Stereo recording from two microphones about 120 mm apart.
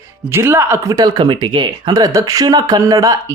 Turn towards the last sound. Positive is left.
turn(degrees=-30)  # may be behind; listen again after turning